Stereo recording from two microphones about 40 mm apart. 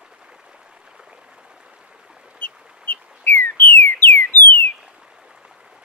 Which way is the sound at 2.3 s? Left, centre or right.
Left.